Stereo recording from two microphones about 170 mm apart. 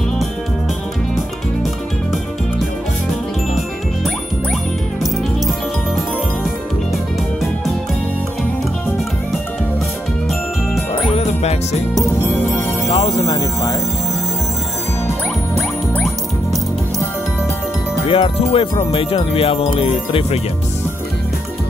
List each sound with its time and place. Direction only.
11.1 s music: 35° left (ahead or behind)
12.2 s music: 10° left (ahead or behind)
12.9 s music: 40° left (ahead or behind)
13.3 s music: 20° left (ahead or behind)
18.0 s music: 35° left (ahead or behind)